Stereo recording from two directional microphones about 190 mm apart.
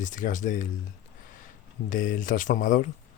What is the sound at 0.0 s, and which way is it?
Speech, 45° left (ahead or behind).